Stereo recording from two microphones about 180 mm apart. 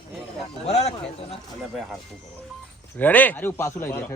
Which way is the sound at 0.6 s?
35° left (ahead or behind).